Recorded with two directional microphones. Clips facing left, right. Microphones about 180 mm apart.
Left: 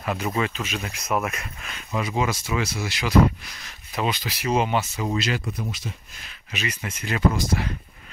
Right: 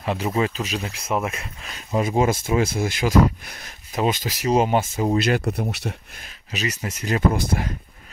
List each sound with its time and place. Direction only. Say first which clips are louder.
0.0 s speech: right 3 dB; 25° right (ahead or behind); by 6.2 s 70° right (ahead or behind)
6.2 s speech: right 3 dB; 40° right (ahead or behind)